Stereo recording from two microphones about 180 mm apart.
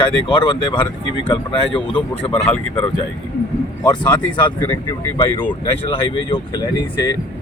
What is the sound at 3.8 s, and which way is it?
Speech, 25° left (ahead or behind).